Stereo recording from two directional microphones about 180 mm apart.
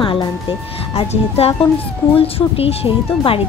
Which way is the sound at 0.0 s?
30° left (ahead or behind).